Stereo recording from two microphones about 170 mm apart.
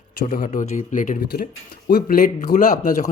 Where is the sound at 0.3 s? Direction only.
50° left (ahead or behind).